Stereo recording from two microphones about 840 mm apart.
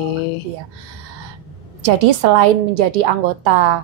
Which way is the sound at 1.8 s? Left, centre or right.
Right.